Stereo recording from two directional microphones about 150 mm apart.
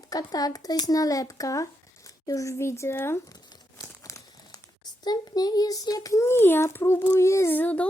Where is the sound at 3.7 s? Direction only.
20° left (ahead or behind).